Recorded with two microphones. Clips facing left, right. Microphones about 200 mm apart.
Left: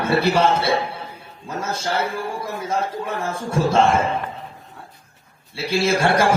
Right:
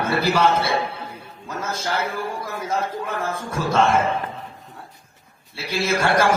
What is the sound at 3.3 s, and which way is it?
Speech, 30° left (ahead or behind).